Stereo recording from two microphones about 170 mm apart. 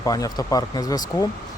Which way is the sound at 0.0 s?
20° left (ahead or behind).